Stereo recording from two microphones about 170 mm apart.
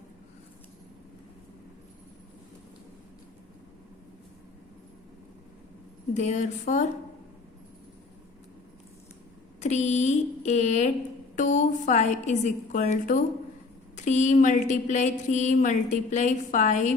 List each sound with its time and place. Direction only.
6.1 s speech: 45° left (ahead or behind)
9.6 s speech: 40° left (ahead or behind)